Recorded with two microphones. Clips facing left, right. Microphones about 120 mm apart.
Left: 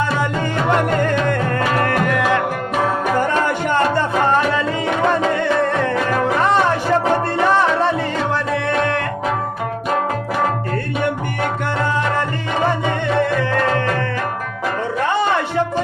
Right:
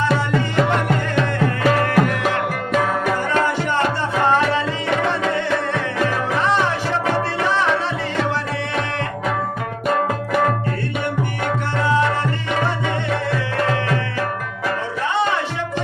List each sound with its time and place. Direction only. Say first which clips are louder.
0.8 s music: left 3 dB; 50° left (ahead or behind)
7.4 s music: left 6 dB; 50° left (ahead or behind)